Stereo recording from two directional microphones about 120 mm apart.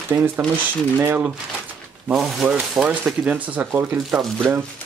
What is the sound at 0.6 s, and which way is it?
Speech, 15° right (ahead or behind).